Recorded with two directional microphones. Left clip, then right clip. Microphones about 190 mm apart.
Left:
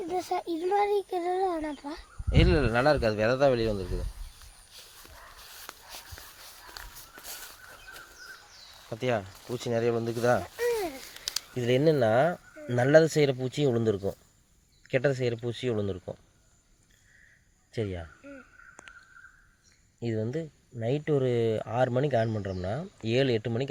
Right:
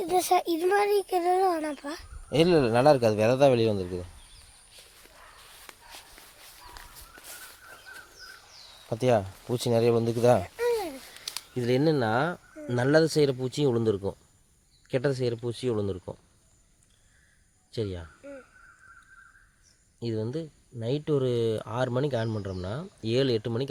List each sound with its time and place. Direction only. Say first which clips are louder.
0.0 s speech: right 7 dB; 60° right (ahead or behind)
5.6 s a sound: left 2 dB; 40° left (ahead or behind)
8.9 s speech: right 5 dB; 55° right (ahead or behind)
10.6 s babbling: right 1 dB; 25° right (ahead or behind)
11.5 s speech: left 1 dB; 25° right (ahead or behind)
17.7 s speech: right 1 dB; 25° right (ahead or behind)
18.2 s caw: right 4 dB; 50° right (ahead or behind)
20.1 s speech: even; 15° right (ahead or behind)